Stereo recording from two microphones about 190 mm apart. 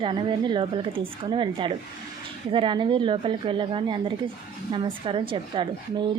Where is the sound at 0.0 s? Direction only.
25° right (ahead or behind).